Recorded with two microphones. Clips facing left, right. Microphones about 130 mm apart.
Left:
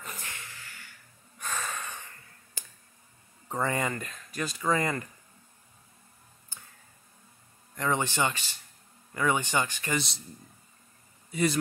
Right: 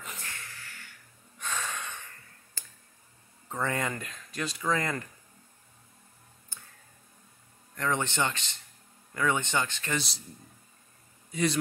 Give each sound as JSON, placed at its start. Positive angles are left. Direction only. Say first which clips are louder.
{"t": 0.2, "sound": "a sound", "louder": "even", "side_deg": 15}
{"t": 1.4, "sound": "snort", "louder": "even", "side_deg": 5}
{"t": 2.6, "sound": "a sound", "louder": "left 3 dB", "side_deg": 15}
{"t": 3.4, "sound": "speech", "louder": "left 2 dB", "side_deg": 10}
{"t": 7.7, "sound": "speech", "louder": "left 1 dB", "side_deg": 10}
{"t": 9.9, "sound": "speech", "louder": "left 2 dB", "side_deg": 0}